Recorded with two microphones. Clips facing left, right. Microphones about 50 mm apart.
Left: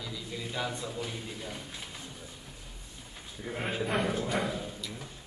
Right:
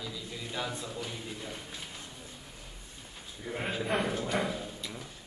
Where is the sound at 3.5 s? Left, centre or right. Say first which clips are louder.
Even; left.